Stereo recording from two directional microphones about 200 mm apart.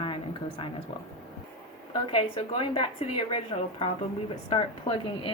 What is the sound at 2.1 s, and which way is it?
A woman's voice, 30° left (ahead or behind).